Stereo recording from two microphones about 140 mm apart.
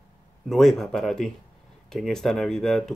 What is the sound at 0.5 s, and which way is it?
Speech, centre (ahead or behind).